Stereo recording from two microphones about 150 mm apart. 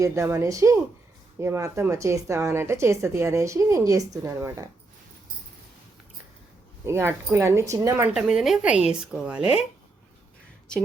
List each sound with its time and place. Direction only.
0.0 s a woman's voice: 20° right (ahead or behind)
6.8 s a woman's voice: 15° right (ahead or behind)
8.1 s a woman's voice: 5° right (ahead or behind)